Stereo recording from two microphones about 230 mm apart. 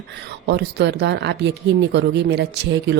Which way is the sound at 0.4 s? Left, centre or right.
Right.